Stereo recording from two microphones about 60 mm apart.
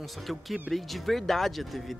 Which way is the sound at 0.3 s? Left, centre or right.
Centre.